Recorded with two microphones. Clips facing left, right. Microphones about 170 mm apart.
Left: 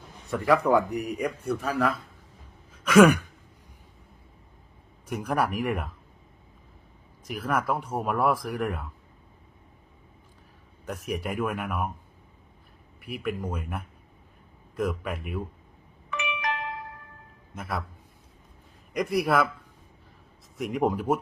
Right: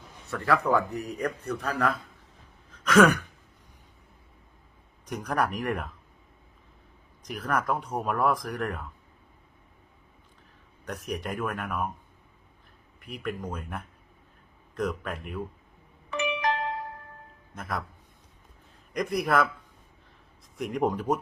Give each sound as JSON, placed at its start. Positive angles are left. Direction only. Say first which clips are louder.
{"t": 0.3, "sound": "a man's voice", "louder": "left 3 dB", "side_deg": 15}
{"t": 2.8, "sound": "a sound", "louder": "left 3 dB", "side_deg": 10}
{"t": 5.0, "sound": "a man's voice", "louder": "left 1 dB", "side_deg": 5}
{"t": 7.2, "sound": "a man's voice", "louder": "left 1 dB", "side_deg": 5}
{"t": 10.8, "sound": "a man's voice", "louder": "left 2 dB", "side_deg": 5}
{"t": 13.0, "sound": "a man's voice", "louder": "left 3 dB", "side_deg": 5}
{"t": 16.0, "sound": "doorbell", "louder": "right 4 dB", "side_deg": -35}
{"t": 17.5, "sound": "a man's voice", "louder": "left 1 dB", "side_deg": 10}
{"t": 18.9, "sound": "a man's voice", "louder": "left 1 dB", "side_deg": 10}
{"t": 20.6, "sound": "speech", "louder": "left 1 dB", "side_deg": 0}